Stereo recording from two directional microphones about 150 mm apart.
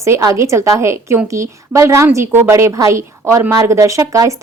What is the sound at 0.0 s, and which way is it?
A woman's voice, 20° right (ahead or behind).